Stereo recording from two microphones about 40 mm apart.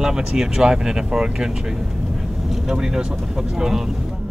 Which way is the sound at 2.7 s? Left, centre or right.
Centre.